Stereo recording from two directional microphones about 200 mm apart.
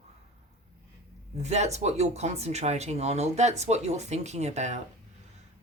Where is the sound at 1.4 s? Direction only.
35° right (ahead or behind).